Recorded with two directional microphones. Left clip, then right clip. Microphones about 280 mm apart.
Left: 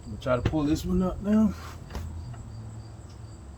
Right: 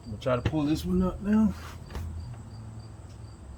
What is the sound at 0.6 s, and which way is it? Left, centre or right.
Speech, centre.